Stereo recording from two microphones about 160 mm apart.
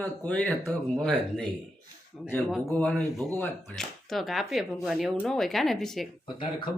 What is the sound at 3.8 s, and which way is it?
A woman's voice, centre (ahead or behind).